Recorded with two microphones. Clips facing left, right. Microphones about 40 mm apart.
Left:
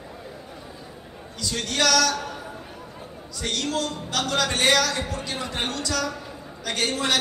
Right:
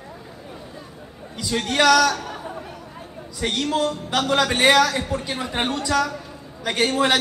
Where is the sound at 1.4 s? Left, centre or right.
Centre.